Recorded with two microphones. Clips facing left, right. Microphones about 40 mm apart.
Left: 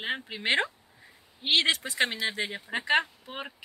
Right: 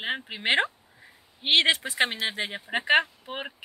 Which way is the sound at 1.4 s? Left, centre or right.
Right.